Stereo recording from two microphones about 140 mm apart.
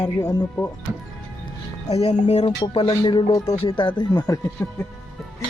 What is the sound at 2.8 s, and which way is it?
Speech, 30° left (ahead or behind).